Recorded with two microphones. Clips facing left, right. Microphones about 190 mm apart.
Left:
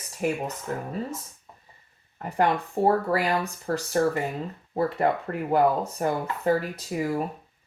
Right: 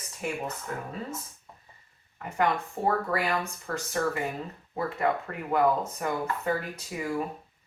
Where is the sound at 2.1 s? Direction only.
35° left (ahead or behind).